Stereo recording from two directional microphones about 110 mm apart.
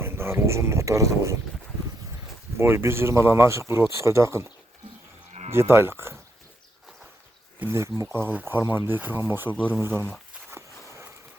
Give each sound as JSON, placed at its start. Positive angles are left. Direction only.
{"t": 0.0, "sound": "speech", "side_deg": -20}
{"t": 2.6, "sound": "speech", "side_deg": -25}
{"t": 5.5, "sound": "speech", "side_deg": -20}
{"t": 7.6, "sound": "speech", "side_deg": -25}
{"t": 9.8, "sound": "a sound", "side_deg": -20}